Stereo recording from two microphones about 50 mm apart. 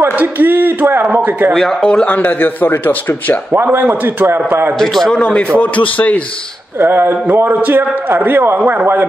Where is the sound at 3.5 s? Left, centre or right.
Right.